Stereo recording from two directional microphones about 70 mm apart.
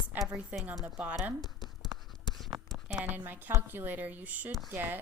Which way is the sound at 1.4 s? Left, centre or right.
Left.